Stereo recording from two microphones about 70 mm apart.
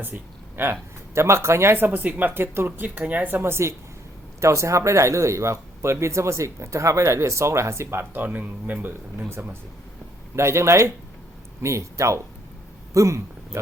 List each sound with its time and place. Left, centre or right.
0.0 s speech: right